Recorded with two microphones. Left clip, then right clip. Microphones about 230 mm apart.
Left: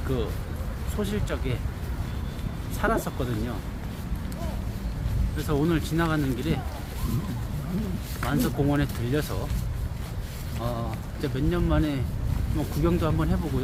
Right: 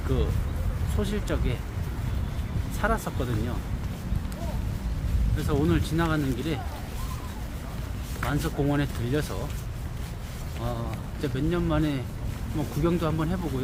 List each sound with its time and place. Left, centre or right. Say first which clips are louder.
1.0 s speech: even; centre
2.8 s speech: left 1 dB; centre
5.4 s speech: left 1 dB; centre
8.2 s speech: left 2 dB; centre
11.2 s speech: even; centre